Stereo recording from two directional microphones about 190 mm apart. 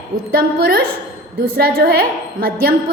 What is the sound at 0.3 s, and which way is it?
A woman's voice, 50° right (ahead or behind).